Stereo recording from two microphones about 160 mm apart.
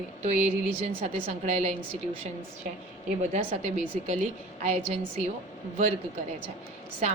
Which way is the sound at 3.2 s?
40° right (ahead or behind).